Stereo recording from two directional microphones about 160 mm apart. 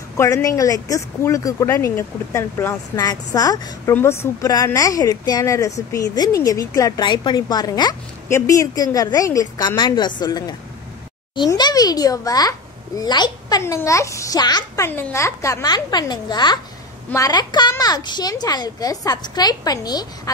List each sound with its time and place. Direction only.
0.2 s a woman's voice: 20° left (ahead or behind)